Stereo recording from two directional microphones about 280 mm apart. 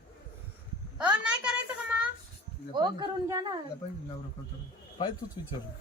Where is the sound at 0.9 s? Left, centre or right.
Centre.